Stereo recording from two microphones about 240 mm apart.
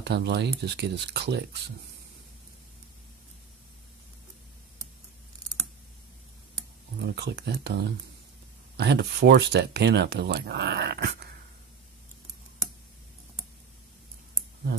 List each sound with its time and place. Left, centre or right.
0.0 s speech: right
7.0 s speech: right